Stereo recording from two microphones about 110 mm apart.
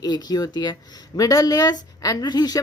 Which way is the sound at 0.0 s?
40° left (ahead or behind).